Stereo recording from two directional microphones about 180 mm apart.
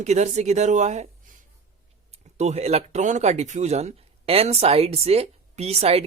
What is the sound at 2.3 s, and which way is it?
Speech, 40° right (ahead or behind).